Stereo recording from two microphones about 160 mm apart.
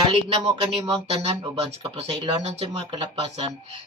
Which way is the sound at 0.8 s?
30° right (ahead or behind).